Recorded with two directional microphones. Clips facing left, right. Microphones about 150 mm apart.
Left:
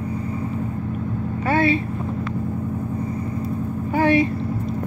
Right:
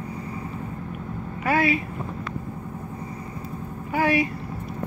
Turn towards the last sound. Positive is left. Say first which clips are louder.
# left 5 dB
turn(degrees=30)  # may be behind; listen again after turning